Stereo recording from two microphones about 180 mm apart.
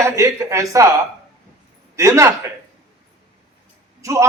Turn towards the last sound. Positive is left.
turn(degrees=-15)  # may be behind; listen again after turning